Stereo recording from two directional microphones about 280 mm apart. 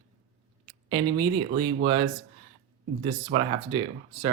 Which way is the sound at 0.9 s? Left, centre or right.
Centre.